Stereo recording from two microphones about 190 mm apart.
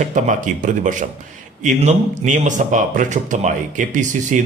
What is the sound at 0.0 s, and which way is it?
Speech, 40° right (ahead or behind).